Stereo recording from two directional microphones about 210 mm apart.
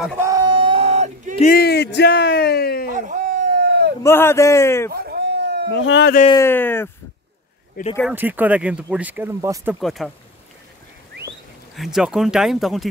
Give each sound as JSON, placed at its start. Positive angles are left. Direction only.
{"t": 0.2, "sound": "a sound", "side_deg": -20}
{"t": 1.4, "sound": "a man's voice", "side_deg": 45}
{"t": 3.0, "sound": "a sound", "side_deg": -35}
{"t": 4.0, "sound": "a man's voice", "side_deg": 10}
{"t": 4.9, "sound": "a sound", "side_deg": -50}
{"t": 5.7, "sound": "a man's voice", "side_deg": 55}
{"t": 6.4, "sound": "a man's voice", "side_deg": 10}
{"t": 8.1, "sound": "speech", "side_deg": -10}
{"t": 9.8, "sound": "speech", "side_deg": 0}
{"t": 11.7, "sound": "speech", "side_deg": 0}